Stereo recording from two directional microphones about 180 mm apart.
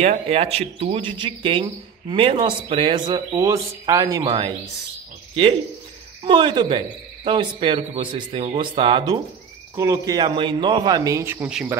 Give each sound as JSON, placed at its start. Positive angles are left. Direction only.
{"t": 0.0, "sound": "speech", "side_deg": -35}
{"t": 6.2, "sound": "speech", "side_deg": -25}